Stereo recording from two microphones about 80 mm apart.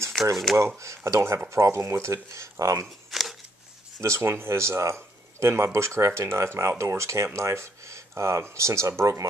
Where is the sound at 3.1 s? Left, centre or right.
Centre.